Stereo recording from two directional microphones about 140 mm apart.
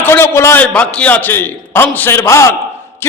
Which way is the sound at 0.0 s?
20° left (ahead or behind).